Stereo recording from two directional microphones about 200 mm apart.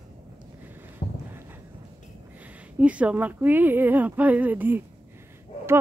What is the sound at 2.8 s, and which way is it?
Speech, 5° right (ahead or behind).